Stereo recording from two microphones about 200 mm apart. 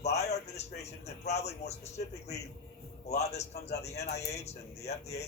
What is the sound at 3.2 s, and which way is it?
A man's voice, 35° left (ahead or behind).